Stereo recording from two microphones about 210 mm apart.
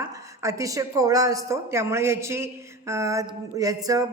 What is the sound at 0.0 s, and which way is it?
A woman's voice, 15° right (ahead or behind).